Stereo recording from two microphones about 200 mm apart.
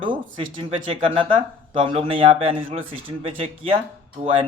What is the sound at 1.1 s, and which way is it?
Speech, 25° right (ahead or behind).